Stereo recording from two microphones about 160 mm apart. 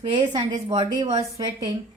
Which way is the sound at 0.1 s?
30° right (ahead or behind).